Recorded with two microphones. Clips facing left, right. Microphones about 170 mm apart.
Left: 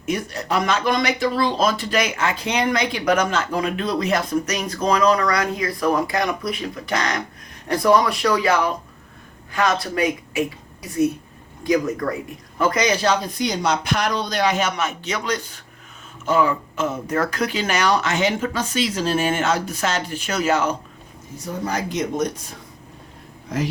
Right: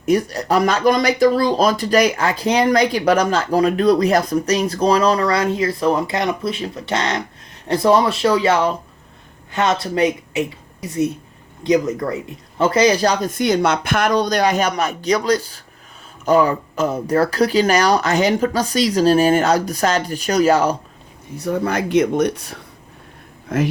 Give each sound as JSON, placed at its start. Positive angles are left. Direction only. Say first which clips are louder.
{"t": 0.0, "sound": "a woman's voice", "louder": "right 8 dB", "side_deg": -40}
{"t": 21.3, "sound": "speech", "louder": "right 6 dB", "side_deg": -60}
{"t": 23.5, "sound": "speech", "louder": "right 5 dB", "side_deg": -55}